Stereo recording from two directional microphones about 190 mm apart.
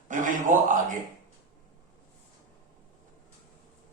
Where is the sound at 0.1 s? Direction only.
45° right (ahead or behind).